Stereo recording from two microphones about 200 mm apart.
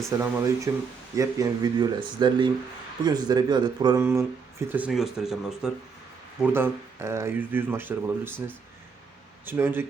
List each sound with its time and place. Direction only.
0.2 s speech: 15° right (ahead or behind)
4.7 s speech: 5° right (ahead or behind)